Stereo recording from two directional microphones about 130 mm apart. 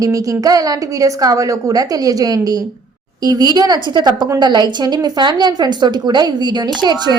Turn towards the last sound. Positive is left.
turn(degrees=-35)  # may be behind; listen again after turning